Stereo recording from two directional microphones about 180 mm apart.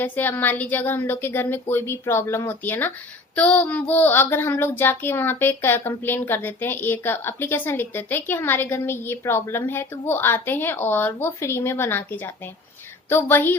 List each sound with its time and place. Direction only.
0.0 s child singing: 10° left (ahead or behind)